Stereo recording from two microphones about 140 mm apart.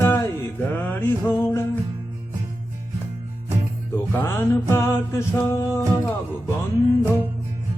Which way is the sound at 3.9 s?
15° left (ahead or behind).